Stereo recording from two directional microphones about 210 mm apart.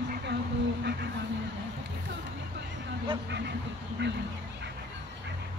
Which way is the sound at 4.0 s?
55° right (ahead or behind).